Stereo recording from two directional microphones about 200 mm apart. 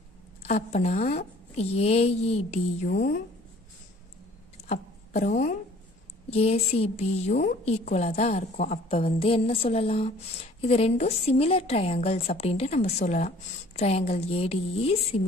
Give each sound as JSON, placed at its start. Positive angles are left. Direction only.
{"t": 0.4, "sound": "a woman's voice", "side_deg": 35}
{"t": 4.6, "sound": "a sound", "side_deg": 35}
{"t": 6.3, "sound": "a woman's voice", "side_deg": 30}